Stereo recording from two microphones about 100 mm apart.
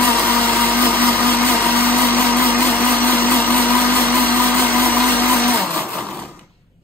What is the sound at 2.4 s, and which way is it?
Blender, 20° left (ahead or behind).